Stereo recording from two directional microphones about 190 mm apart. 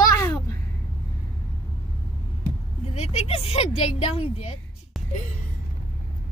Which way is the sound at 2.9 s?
35° left (ahead or behind).